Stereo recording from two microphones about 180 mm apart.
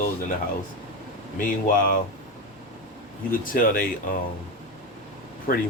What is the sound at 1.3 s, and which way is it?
Speech, 50° left (ahead or behind).